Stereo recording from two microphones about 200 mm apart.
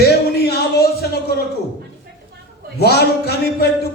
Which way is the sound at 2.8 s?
55° left (ahead or behind).